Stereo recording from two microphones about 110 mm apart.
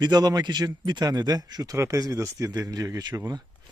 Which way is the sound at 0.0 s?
35° right (ahead or behind).